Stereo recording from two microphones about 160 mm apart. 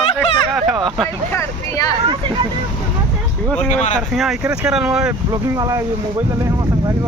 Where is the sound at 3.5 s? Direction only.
10° left (ahead or behind).